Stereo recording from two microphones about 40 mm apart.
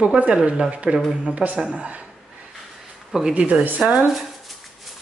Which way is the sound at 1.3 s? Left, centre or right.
Right.